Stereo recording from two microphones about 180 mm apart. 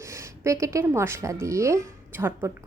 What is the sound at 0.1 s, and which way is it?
A woman's voice, 15° right (ahead or behind).